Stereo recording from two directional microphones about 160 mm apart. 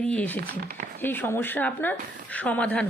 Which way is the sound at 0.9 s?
10° left (ahead or behind).